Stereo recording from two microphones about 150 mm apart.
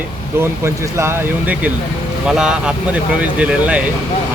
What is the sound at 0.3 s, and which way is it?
Speech, 15° right (ahead or behind).